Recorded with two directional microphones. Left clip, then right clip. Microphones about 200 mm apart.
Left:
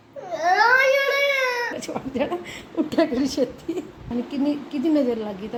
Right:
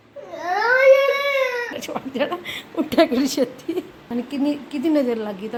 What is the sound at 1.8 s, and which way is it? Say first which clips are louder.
A woman's voice: right 2 dB; 5° right (ahead or behind).